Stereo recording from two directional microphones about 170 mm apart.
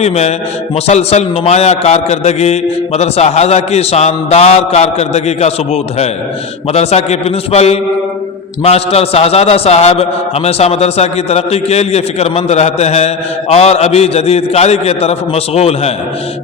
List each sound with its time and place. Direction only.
0.0 s a man's voice: 40° left (ahead or behind)